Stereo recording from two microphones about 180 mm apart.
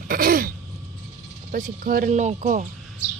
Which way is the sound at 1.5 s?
50° right (ahead or behind).